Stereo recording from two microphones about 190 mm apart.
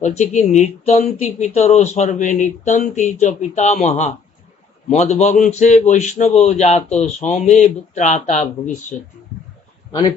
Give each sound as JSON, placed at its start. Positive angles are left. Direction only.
{"t": 0.0, "sound": "a man's voice", "side_deg": 40}